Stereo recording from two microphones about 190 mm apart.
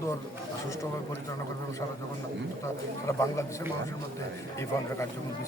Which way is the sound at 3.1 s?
15° left (ahead or behind).